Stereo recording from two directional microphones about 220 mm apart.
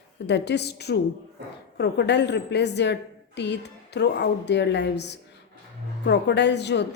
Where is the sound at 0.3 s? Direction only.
50° left (ahead or behind).